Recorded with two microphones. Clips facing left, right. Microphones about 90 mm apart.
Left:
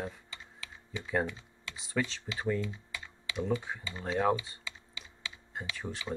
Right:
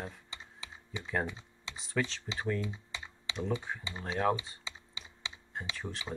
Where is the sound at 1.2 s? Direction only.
20° right (ahead or behind).